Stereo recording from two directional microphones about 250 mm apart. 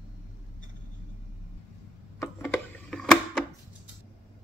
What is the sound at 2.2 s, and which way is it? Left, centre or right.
Music, centre.